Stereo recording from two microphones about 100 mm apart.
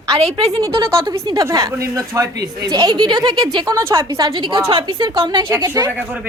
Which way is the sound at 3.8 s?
30° right (ahead or behind).